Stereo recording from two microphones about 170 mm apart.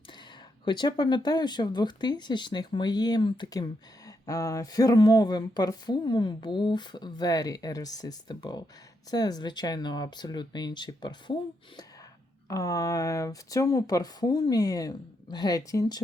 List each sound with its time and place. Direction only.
0.6 s speech: 25° left (ahead or behind)
12.5 s speech: 20° left (ahead or behind)